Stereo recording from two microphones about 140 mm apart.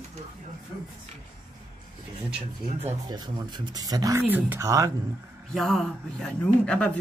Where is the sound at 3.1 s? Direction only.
30° right (ahead or behind).